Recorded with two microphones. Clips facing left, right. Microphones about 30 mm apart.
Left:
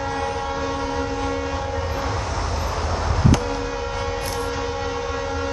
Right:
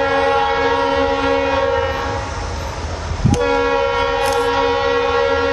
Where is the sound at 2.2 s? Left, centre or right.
Centre.